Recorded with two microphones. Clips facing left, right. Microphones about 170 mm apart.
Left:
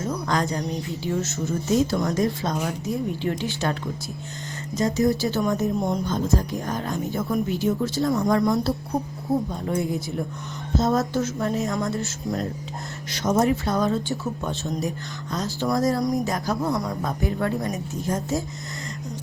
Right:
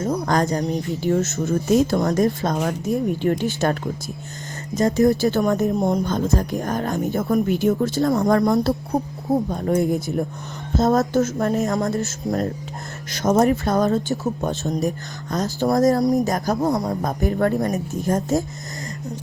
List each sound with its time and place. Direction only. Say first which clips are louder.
0.0 s speech: right 4 dB; 40° right (ahead or behind)
4.8 s speech: right 5 dB; 50° right (ahead or behind)